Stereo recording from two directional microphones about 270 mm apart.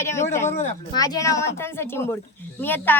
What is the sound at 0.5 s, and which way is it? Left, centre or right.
Speech, left.